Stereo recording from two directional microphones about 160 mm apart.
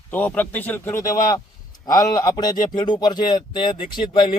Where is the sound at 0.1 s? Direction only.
10° left (ahead or behind).